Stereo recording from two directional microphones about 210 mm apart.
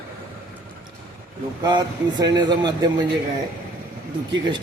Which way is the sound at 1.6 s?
20° right (ahead or behind).